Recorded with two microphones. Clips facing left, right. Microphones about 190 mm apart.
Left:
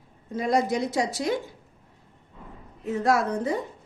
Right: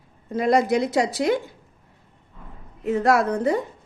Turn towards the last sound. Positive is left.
turn(degrees=-65)  # may be behind; listen again after turning